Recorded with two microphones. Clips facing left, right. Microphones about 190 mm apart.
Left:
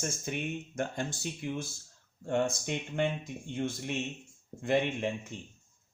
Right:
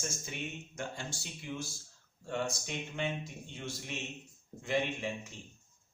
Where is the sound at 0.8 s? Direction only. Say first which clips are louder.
Left 6 dB; 55° left (ahead or behind).